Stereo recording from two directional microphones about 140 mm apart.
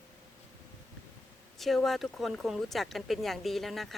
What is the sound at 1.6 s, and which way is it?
Speech, centre (ahead or behind).